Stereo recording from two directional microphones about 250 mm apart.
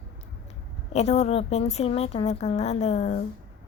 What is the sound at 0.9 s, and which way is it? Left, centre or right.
A woman's voice, left.